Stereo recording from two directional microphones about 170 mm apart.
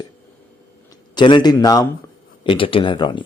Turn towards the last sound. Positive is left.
turn(degrees=30)  # may be behind; listen again after turning